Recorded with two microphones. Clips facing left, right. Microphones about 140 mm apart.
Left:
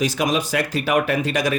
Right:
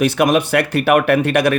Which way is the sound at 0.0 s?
60° right (ahead or behind).